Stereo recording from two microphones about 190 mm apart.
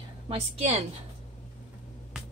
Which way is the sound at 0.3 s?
35° right (ahead or behind).